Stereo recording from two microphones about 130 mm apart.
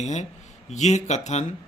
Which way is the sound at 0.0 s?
65° left (ahead or behind).